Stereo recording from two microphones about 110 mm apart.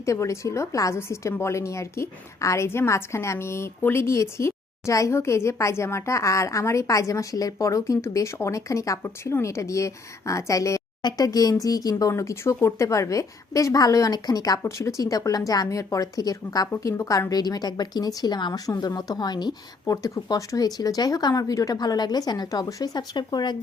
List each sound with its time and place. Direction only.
0.0 s a woman's voice: 30° left (ahead or behind); by 23.6 s 45° left (ahead or behind)